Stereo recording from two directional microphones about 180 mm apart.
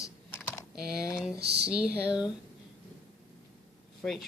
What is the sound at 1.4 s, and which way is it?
Speech, 65° right (ahead or behind).